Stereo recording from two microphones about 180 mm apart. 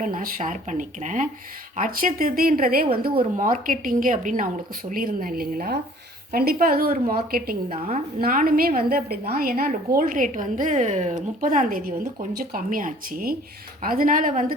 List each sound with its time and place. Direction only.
0.0 s a woman's voice: 45° right (ahead or behind)
7.7 s a woman's voice: 35° right (ahead or behind)
8.2 s a woman's voice: 50° right (ahead or behind)